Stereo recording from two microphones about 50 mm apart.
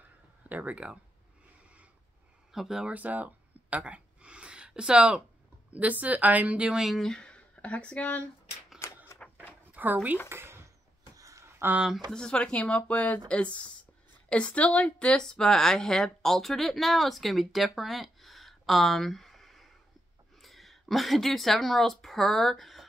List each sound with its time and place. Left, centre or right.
0.4 s speech: right
2.5 s speech: centre
2.9 s a sound: right
5.7 s a woman's voice: right
7.0 s speech: centre
8.7 s typewriter: left
9.2 s a sound: left
9.8 s speech: right
10.3 s a sound: right
11.6 s speech: right
12.1 s speech: centre